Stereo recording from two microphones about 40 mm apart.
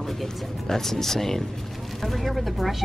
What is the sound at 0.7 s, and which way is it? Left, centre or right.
Speech, centre.